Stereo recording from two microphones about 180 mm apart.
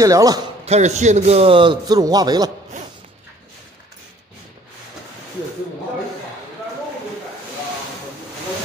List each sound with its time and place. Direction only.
0.0 s a man's voice: 20° right (ahead or behind)
0.7 s a man's voice: 40° right (ahead or behind); by 2.5 s 20° right (ahead or behind)